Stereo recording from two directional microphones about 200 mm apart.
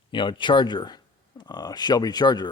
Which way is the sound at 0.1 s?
25° left (ahead or behind).